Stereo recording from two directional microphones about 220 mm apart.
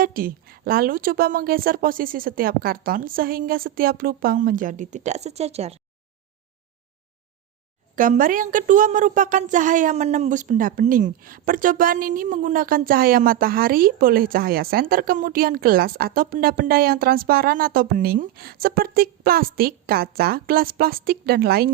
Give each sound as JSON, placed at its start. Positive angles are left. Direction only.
{"t": 0.0, "sound": "speech", "side_deg": -40}
{"t": 7.9, "sound": "speech", "side_deg": -35}